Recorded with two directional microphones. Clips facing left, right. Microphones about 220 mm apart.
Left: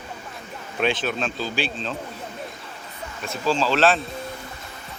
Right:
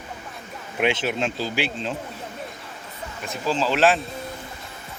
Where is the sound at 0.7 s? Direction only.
20° right (ahead or behind).